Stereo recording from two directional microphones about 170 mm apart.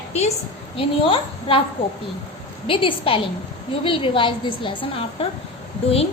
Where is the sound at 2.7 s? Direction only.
30° left (ahead or behind).